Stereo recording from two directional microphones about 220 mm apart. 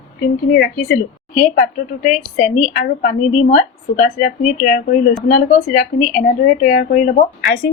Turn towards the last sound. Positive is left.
turn(degrees=40)  # may be behind; listen again after turning